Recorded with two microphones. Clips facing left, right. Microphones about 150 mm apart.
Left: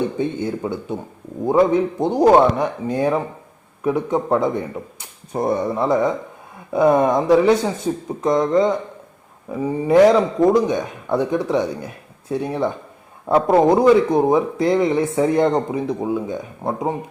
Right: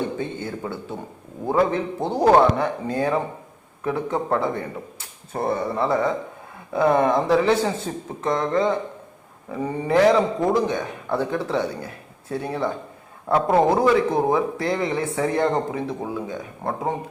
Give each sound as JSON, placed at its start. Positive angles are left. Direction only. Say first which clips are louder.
{"t": 0.2, "sound": "a man's voice", "louder": "left 6 dB", "side_deg": 15}